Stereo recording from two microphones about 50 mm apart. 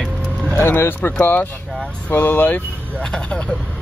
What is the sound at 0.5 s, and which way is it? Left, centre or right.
Speech, left.